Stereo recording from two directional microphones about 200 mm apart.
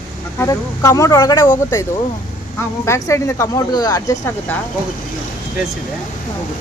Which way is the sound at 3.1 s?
15° left (ahead or behind).